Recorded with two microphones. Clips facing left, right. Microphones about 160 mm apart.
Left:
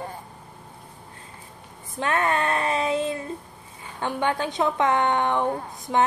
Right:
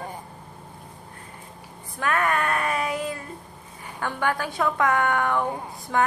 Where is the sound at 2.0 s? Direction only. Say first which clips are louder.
Left 1 dB; 25° left (ahead or behind).